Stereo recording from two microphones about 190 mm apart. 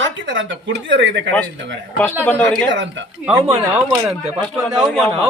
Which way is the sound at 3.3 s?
15° right (ahead or behind).